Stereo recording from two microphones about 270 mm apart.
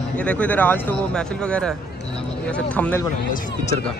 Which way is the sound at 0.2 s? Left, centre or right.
Centre.